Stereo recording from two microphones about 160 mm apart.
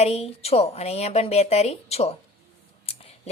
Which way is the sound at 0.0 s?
40° left (ahead or behind).